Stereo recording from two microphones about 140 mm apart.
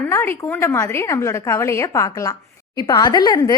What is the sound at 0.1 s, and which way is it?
A woman's voice, 15° left (ahead or behind).